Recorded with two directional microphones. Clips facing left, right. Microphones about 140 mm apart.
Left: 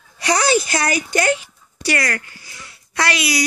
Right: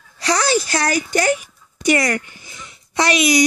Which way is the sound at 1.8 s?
20° right (ahead or behind).